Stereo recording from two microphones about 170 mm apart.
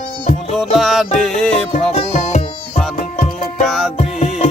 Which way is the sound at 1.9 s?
40° left (ahead or behind).